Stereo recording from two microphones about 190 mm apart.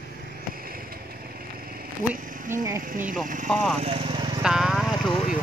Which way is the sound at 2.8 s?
45° right (ahead or behind).